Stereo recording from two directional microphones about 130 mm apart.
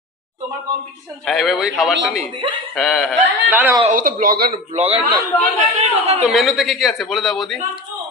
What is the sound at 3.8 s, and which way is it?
Speech, 90° right.